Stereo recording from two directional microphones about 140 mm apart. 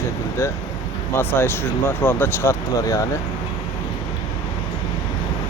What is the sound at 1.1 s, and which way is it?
Speech, 15° left (ahead or behind).